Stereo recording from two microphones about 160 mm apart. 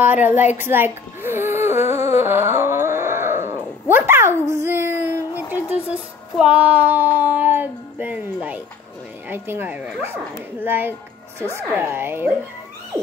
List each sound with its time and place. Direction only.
0.0 s speech: 10° right (ahead or behind)
0.5 s music: 15° right (ahead or behind)
3.9 s a sound: 15° right (ahead or behind)
6.3 s speech: 10° right (ahead or behind)